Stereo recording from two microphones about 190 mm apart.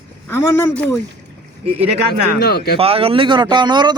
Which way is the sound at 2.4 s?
55° left (ahead or behind).